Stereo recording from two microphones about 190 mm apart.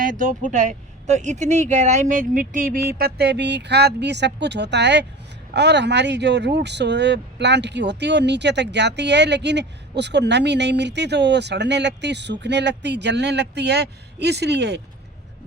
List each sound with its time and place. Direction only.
0.0 s speech: 45° right (ahead or behind)
3.0 s speech: 60° right (ahead or behind)